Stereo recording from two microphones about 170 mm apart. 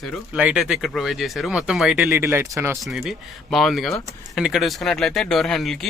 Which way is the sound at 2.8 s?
Centre (ahead or behind).